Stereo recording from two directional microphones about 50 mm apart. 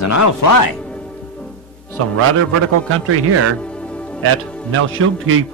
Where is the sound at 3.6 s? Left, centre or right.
Left.